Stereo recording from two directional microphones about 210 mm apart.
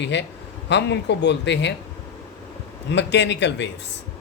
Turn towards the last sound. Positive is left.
turn(degrees=55)  # may be behind; listen again after turning